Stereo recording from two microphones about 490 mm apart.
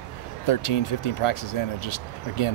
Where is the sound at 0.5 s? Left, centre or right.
Left.